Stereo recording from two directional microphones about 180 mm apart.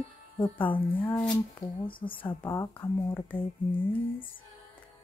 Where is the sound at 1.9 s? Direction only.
30° left (ahead or behind).